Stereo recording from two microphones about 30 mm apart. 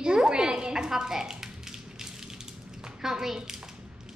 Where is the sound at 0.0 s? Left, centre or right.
Right.